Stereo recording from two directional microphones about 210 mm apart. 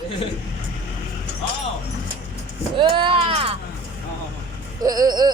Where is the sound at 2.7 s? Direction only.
20° right (ahead or behind).